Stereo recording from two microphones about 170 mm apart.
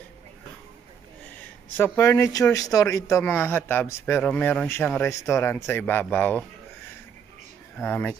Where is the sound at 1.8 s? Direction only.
15° left (ahead or behind).